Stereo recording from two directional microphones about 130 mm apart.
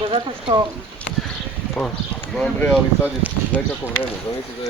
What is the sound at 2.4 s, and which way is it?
Speech, 10° left (ahead or behind).